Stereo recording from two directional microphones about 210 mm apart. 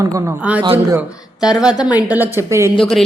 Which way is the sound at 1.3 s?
20° left (ahead or behind).